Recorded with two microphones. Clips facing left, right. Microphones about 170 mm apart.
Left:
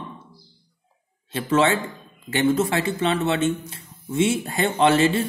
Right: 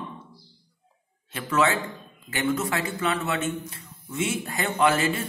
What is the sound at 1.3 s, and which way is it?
Speech, 30° left (ahead or behind).